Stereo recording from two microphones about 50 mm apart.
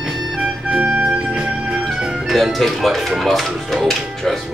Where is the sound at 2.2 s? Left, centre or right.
Centre.